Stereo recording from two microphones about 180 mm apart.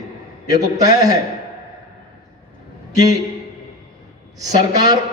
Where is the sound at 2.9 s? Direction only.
20° right (ahead or behind).